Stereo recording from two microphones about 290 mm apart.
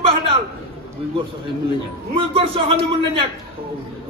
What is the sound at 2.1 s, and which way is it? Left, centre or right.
Speech, centre.